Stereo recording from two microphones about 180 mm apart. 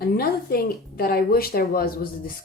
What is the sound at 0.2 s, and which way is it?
A woman's voice, 55° left (ahead or behind).